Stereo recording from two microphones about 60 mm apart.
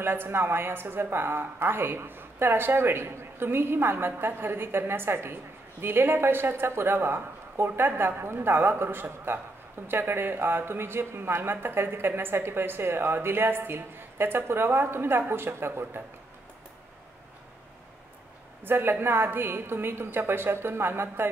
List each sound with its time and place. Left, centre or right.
0.0 s speech: right
18.6 s speech: right